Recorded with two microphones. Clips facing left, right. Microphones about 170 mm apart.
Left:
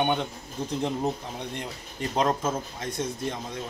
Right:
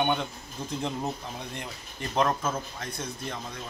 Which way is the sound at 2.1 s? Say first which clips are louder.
Left 1 dB; 20° left (ahead or behind).